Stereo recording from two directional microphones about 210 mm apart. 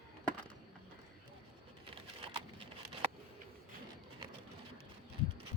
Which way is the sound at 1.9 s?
25° right (ahead or behind).